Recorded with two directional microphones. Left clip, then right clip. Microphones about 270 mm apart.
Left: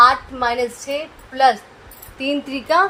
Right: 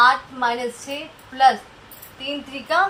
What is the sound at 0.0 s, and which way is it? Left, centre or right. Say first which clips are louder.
Speech: left 3 dB; left.